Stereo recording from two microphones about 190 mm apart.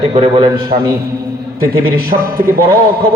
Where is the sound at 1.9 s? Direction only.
50° right (ahead or behind).